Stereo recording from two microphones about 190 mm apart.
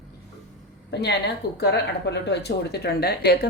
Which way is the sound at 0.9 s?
60° left (ahead or behind).